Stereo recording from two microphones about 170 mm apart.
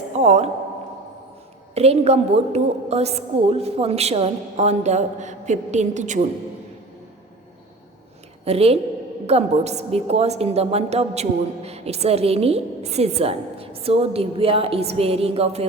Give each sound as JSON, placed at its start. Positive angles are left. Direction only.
{"t": 0.1, "sound": "a woman's voice", "side_deg": -40}
{"t": 1.7, "sound": "a woman's voice", "side_deg": -35}
{"t": 8.4, "sound": "a woman's voice", "side_deg": -35}